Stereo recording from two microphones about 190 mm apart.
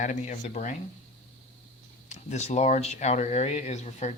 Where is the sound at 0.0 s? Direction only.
40° left (ahead or behind).